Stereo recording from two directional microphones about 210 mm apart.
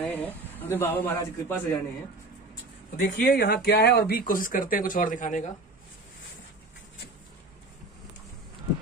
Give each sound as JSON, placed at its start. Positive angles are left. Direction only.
{"t": 0.0, "sound": "a man's voice", "side_deg": 10}
{"t": 3.0, "sound": "speech", "side_deg": 45}